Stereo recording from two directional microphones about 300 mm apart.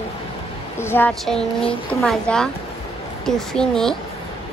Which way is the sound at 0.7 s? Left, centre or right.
Centre.